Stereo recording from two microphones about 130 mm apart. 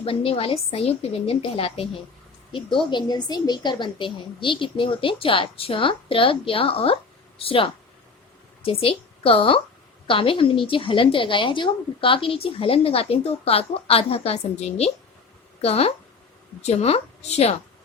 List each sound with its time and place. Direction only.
0.0 s a woman's voice: 45° left (ahead or behind)